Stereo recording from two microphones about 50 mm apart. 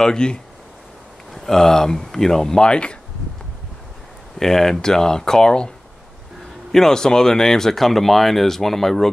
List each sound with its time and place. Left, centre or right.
0.0 s speech: centre
4.4 s speech: centre
6.7 s speech: centre